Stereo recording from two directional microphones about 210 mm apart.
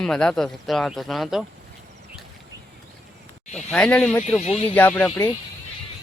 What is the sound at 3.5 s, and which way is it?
Speech, 5° left (ahead or behind).